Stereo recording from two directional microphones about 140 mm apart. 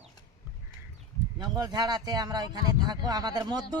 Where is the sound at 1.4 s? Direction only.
30° right (ahead or behind).